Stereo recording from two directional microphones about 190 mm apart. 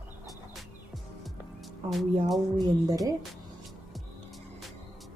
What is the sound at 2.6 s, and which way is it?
Speech, 20° right (ahead or behind).